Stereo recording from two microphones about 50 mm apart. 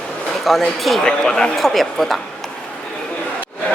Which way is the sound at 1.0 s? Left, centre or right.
Centre.